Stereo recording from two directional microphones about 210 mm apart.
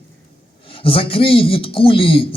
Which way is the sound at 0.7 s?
25° left (ahead or behind).